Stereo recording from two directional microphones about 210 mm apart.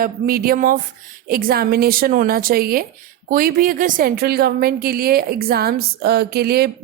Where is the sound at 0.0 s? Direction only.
45° right (ahead or behind).